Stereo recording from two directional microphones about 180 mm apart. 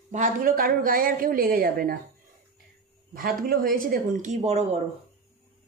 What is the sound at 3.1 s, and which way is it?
Speech, 55° right (ahead or behind).